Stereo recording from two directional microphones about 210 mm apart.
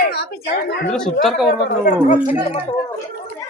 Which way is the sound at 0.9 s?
5° left (ahead or behind).